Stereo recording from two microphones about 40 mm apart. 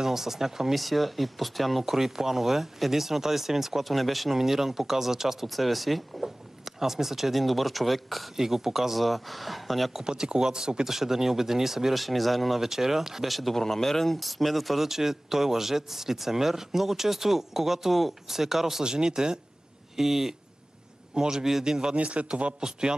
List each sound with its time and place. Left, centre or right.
0.0 s speech: centre
10.0 s speech: centre
18.9 s speech: centre
21.9 s speech: right